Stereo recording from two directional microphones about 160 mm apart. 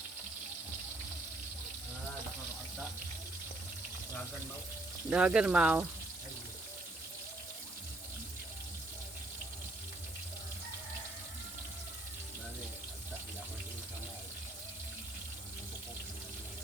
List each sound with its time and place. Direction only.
5.0 s speech: 5° right (ahead or behind)